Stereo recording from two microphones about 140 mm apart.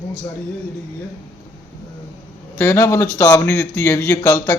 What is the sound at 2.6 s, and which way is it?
Speech, 20° left (ahead or behind).